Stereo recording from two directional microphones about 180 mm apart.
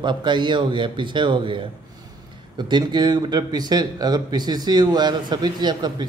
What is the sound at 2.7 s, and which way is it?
Speech, 25° right (ahead or behind).